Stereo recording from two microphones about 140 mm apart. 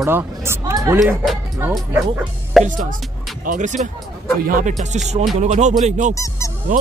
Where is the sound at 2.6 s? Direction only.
65° right (ahead or behind).